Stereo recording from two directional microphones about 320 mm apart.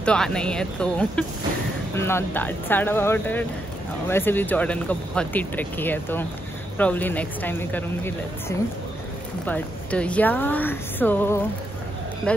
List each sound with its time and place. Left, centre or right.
0.0 s speech: centre